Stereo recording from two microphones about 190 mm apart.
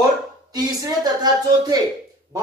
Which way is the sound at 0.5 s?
20° right (ahead or behind).